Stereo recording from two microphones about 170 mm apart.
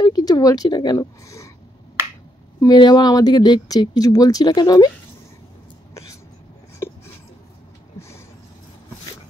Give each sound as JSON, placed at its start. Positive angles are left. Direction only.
{"t": 0.0, "sound": "speech", "side_deg": 25}
{"t": 2.6, "sound": "speech", "side_deg": 25}